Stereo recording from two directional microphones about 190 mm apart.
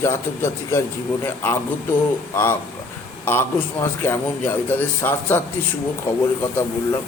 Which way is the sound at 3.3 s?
10° left (ahead or behind).